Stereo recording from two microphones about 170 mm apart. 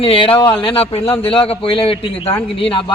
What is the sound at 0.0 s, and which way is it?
A man's voice, 30° left (ahead or behind).